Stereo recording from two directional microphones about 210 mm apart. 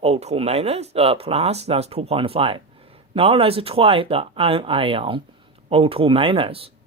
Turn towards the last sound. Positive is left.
turn(degrees=-25)  # may be behind; listen again after turning